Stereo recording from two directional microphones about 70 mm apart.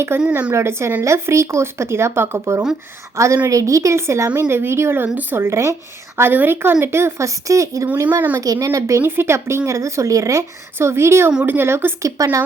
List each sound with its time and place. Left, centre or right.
0.1 s speech: right
5.0 s speech: right
5.4 s speech: right
6.1 s speech: right
9.0 s speech: right
10.8 s speech: right
12.0 s speech: right